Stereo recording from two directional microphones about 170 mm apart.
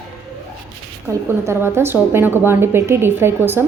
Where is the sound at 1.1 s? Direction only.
15° right (ahead or behind).